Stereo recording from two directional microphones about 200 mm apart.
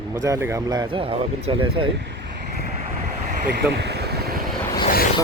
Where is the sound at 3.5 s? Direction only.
55° right (ahead or behind).